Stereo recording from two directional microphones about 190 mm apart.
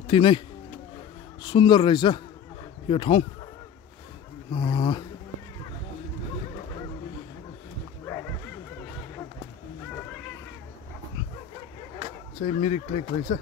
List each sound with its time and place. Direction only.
0.0 s speech: 25° left (ahead or behind)
1.4 s a man's voice: 25° left (ahead or behind)
4.5 s a man's voice: 25° left (ahead or behind)
12.4 s speech: 35° left (ahead or behind)